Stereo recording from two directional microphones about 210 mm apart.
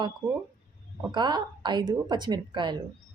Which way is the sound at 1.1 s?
20° right (ahead or behind).